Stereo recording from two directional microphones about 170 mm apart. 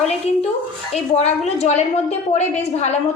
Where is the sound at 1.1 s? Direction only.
40° left (ahead or behind).